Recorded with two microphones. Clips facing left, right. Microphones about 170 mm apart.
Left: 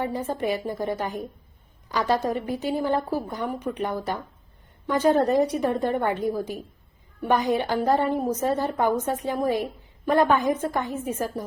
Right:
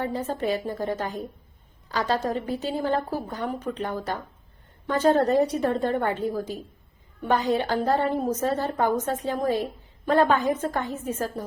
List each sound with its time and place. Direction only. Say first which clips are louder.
0.0 s a woman's voice: left 1 dB; 15° left (ahead or behind)